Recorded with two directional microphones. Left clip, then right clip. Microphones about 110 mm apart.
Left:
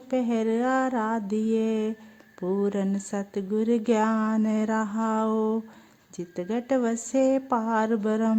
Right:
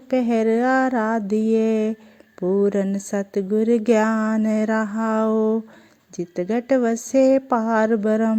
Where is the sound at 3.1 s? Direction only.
30° right (ahead or behind).